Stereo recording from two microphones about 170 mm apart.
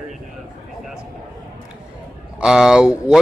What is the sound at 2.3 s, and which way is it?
Speech, 5° right (ahead or behind).